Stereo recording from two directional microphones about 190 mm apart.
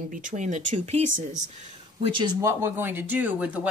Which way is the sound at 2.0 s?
25° right (ahead or behind).